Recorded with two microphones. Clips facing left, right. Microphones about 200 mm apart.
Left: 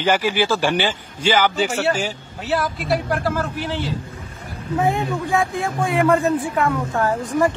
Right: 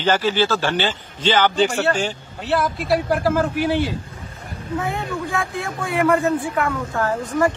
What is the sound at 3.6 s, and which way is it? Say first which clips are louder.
Speech: right 5 dB; 10° right (ahead or behind).